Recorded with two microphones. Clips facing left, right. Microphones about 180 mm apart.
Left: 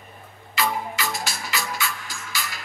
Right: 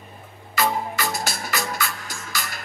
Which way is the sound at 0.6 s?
45° right (ahead or behind).